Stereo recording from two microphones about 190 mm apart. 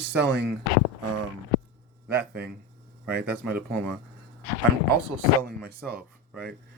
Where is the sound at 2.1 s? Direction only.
55° right (ahead or behind).